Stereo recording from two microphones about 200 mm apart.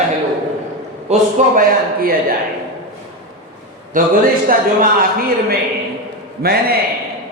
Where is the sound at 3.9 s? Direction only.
45° right (ahead or behind).